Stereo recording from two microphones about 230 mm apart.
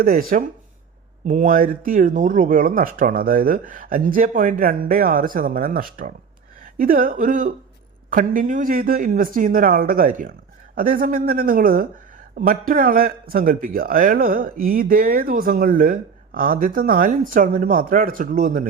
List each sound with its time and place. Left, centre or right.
0.0 s a man's voice: right